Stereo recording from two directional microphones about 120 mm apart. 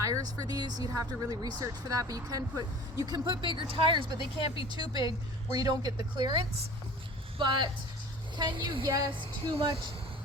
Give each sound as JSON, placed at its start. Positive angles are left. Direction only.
{"t": 0.0, "sound": "speech", "side_deg": -30}
{"t": 3.2, "sound": "speech", "side_deg": -45}